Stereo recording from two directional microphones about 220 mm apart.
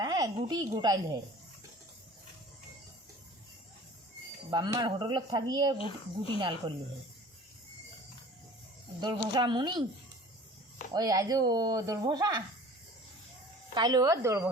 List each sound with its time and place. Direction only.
0.0 s a sound: 15° right (ahead or behind)
0.3 s speech: 20° right (ahead or behind)
4.5 s speech: 20° right (ahead or behind)
9.0 s speech: 20° right (ahead or behind)
10.9 s speech: 15° right (ahead or behind)
13.7 s speech: 15° right (ahead or behind)